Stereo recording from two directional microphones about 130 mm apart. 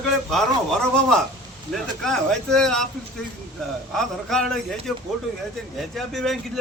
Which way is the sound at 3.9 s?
5° left (ahead or behind).